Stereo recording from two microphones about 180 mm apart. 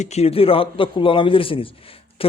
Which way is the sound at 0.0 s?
35° left (ahead or behind).